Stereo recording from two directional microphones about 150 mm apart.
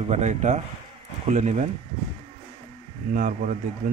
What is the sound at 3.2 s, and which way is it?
Speech, 60° right (ahead or behind).